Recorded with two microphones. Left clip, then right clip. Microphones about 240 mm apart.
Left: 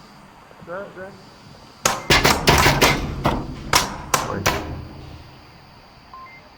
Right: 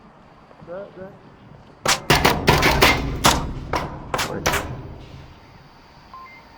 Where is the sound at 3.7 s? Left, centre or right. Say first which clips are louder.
Left 7 dB; left.